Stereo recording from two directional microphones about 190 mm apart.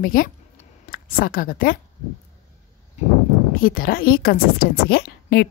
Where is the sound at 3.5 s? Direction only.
50° left (ahead or behind).